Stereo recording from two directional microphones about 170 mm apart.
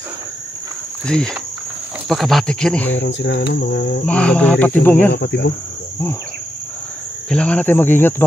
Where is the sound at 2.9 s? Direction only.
90° left.